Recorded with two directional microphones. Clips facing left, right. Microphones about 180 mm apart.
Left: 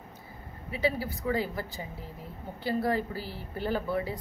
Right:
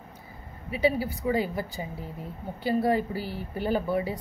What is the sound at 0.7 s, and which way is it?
A woman's voice, 15° right (ahead or behind).